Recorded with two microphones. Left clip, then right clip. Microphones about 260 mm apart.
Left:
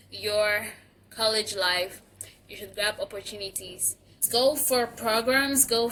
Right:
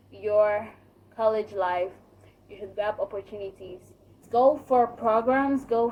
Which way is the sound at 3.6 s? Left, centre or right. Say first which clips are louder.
Right 1 dB; left.